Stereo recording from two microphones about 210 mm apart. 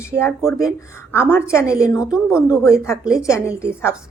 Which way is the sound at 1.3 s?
15° left (ahead or behind).